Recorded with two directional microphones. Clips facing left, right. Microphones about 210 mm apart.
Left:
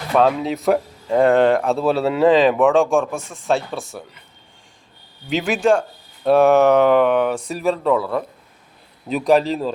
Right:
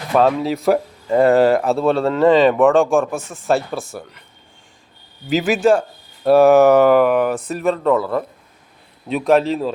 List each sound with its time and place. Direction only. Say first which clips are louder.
0.1 s speech: right 1 dB; centre (ahead or behind)
5.3 s speech: right 2 dB; centre (ahead or behind)